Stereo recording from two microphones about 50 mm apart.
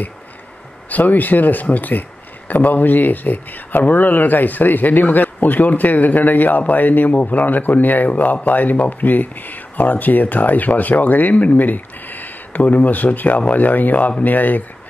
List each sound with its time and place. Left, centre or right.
0.8 s speech: left